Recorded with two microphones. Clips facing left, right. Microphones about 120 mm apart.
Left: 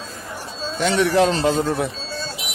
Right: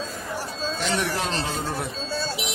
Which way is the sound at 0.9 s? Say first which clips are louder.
Left 13 dB; 90° left.